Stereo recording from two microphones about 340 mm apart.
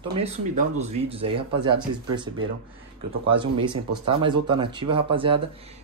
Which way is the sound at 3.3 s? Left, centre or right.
Centre.